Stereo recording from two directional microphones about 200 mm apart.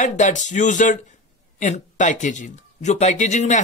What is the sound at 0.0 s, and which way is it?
Speech, 35° left (ahead or behind).